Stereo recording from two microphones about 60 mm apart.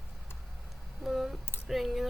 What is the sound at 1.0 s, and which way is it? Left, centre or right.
Speech, centre.